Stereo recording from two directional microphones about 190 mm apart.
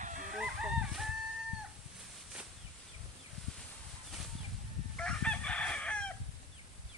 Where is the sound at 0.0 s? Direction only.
40° right (ahead or behind).